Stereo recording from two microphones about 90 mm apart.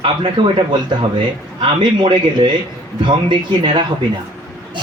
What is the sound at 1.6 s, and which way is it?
A man's voice, 65° right (ahead or behind).